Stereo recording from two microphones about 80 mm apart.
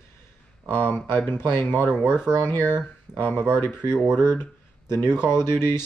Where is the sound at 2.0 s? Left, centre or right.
Centre.